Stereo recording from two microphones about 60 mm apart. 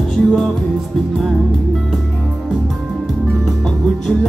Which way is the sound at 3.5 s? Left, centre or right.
Centre.